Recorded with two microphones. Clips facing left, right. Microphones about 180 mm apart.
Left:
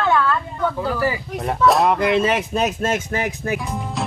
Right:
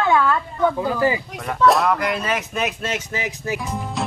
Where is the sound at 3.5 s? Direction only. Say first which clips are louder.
Left 1 dB; centre (ahead or behind).